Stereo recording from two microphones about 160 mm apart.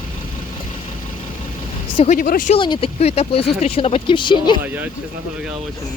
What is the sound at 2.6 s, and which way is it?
Speech, 35° left (ahead or behind).